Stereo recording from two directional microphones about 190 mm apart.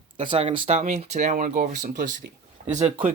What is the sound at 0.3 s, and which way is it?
Speech, 30° right (ahead or behind).